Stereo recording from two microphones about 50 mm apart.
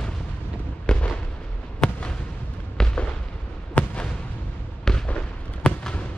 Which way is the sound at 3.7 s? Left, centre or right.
Left.